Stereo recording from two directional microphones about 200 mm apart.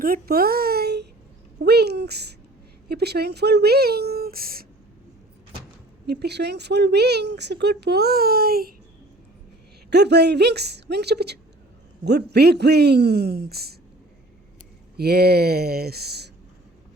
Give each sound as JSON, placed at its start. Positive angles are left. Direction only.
{"t": 0.0, "sound": "a child's voice", "side_deg": -45}
{"t": 6.1, "sound": "speech", "side_deg": -55}
{"t": 9.9, "sound": "speech", "side_deg": -55}
{"t": 14.9, "sound": "speech", "side_deg": -50}